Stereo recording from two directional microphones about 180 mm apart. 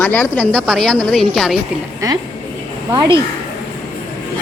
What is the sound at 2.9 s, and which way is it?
Speech, 25° right (ahead or behind).